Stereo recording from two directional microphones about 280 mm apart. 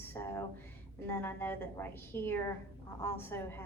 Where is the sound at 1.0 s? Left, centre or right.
Centre.